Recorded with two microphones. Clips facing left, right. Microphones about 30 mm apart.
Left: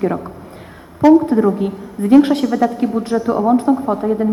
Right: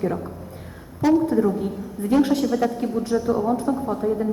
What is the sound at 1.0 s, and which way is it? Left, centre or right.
A woman's voice, left.